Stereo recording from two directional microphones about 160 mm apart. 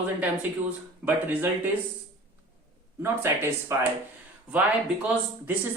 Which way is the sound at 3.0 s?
15° right (ahead or behind).